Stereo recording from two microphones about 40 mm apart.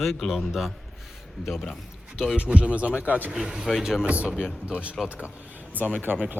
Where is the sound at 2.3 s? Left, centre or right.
Right.